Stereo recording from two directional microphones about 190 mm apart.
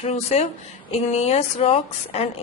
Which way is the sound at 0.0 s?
35° left (ahead or behind).